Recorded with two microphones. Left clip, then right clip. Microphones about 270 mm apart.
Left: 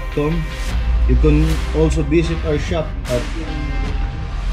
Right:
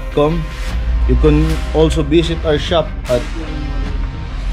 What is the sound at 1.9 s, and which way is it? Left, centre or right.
Speech, centre.